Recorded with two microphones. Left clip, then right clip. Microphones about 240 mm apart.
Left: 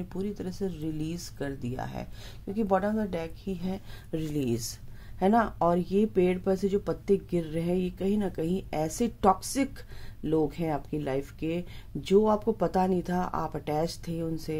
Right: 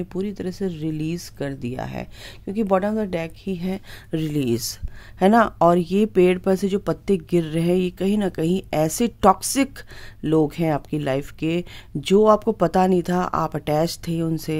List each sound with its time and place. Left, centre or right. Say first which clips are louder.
0.1 s speech: right 7 dB; right